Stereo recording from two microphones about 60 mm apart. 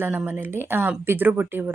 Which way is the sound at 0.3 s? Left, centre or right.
Right.